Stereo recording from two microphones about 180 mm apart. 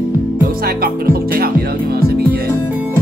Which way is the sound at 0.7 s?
55° right (ahead or behind).